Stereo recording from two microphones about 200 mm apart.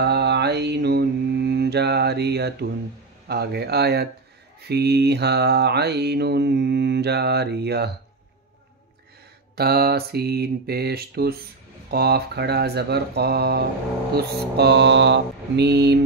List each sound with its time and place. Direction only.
0.0 s mantra: 55° right (ahead or behind)
3.3 s speech: 55° right (ahead or behind)
4.6 s mantra: 55° right (ahead or behind)
9.6 s speech: 50° right (ahead or behind)
14.1 s mantra: 55° right (ahead or behind)